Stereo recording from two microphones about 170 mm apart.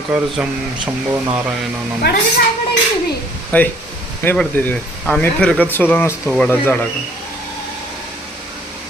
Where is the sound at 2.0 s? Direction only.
75° left (ahead or behind).